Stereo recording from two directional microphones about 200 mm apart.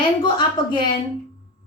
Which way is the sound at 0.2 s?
25° left (ahead or behind).